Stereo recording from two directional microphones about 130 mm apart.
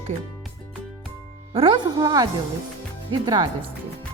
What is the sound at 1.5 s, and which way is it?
Speech, 45° right (ahead or behind).